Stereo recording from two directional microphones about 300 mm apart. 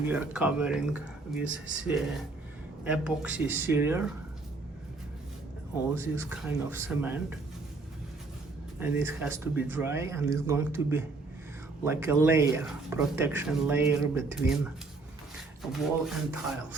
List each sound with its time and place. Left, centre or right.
0.0 s speech: centre
1.5 s speech: right
1.8 s speech: centre
5.9 s speech: centre
8.8 s speech: centre
15.7 s speech: centre